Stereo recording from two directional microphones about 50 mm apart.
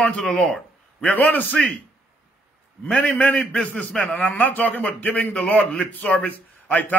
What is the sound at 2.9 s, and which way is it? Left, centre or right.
A man's voice, left.